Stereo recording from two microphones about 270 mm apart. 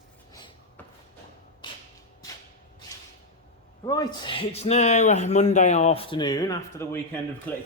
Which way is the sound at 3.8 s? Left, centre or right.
Centre.